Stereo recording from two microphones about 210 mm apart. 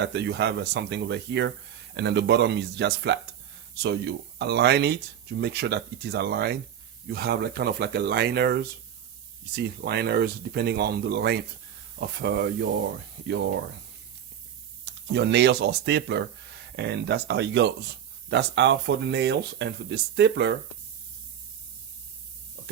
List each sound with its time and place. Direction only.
0.0 s speech: 55° right (ahead or behind)
9.6 s speech: 50° right (ahead or behind)
14.8 s speech: 55° right (ahead or behind)